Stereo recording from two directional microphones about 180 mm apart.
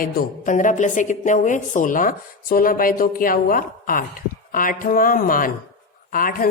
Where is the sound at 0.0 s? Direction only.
45° left (ahead or behind).